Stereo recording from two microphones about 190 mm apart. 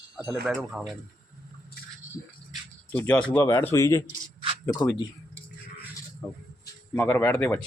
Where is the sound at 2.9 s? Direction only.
10° left (ahead or behind).